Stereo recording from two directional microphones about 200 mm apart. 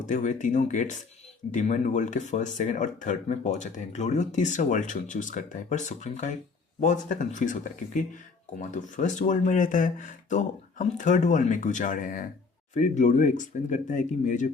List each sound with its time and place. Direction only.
0.0 s speech: 35° left (ahead or behind)